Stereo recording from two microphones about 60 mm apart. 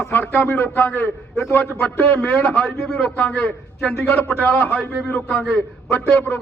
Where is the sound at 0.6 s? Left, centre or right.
Left.